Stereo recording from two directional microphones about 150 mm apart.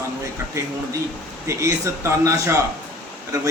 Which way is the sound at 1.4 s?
20° right (ahead or behind).